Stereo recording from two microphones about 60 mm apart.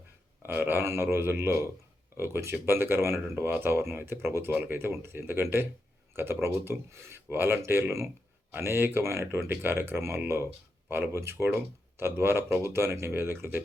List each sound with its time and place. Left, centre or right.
0.4 s speech: right
9.5 s speech: right